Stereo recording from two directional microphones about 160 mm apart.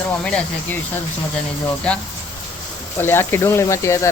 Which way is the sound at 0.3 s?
10° left (ahead or behind).